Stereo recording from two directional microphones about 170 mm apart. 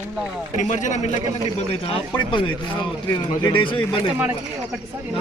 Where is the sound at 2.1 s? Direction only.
30° left (ahead or behind).